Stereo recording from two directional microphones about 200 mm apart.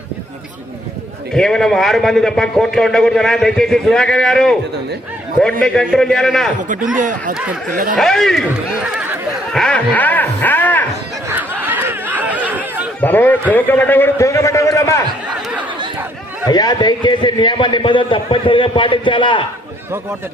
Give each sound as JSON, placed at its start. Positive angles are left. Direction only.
{"t": 1.3, "sound": "a man's voice", "side_deg": 5}
{"t": 5.6, "sound": "a man's voice", "side_deg": 5}
{"t": 6.8, "sound": "speech", "side_deg": -40}
{"t": 7.9, "sound": "a sound", "side_deg": 0}
{"t": 11.3, "sound": "chatter", "side_deg": -10}
{"t": 13.0, "sound": "a man's voice", "side_deg": 10}
{"t": 16.5, "sound": "a man's voice", "side_deg": 20}